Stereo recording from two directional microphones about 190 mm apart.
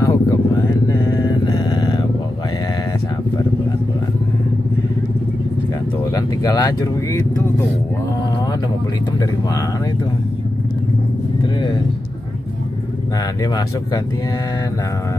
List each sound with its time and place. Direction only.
0.0 s vehicle: 20° left (ahead or behind)
6.1 s speech: 20° left (ahead or behind)
9.2 s speech: 15° left (ahead or behind)
13.4 s speech: 20° left (ahead or behind)